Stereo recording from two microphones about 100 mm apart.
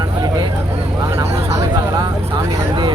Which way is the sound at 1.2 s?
30° right (ahead or behind).